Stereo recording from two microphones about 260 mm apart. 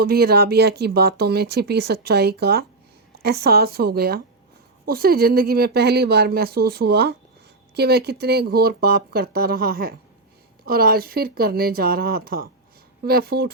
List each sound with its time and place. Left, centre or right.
0.0 s speech: right